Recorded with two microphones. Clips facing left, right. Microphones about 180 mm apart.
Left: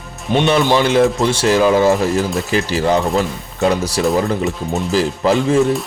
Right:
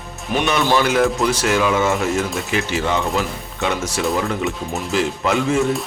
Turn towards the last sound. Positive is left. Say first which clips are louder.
# left 4 dB
turn(degrees=35)  # may be behind; listen again after turning